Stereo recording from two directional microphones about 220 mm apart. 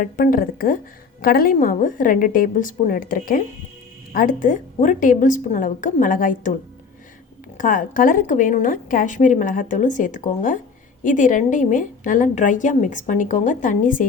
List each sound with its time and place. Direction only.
0.0 s a woman's voice: 40° left (ahead or behind)
7.6 s a woman's voice: 40° left (ahead or behind)